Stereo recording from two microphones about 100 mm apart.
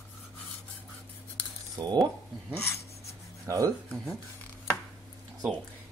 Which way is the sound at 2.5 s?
25° left (ahead or behind).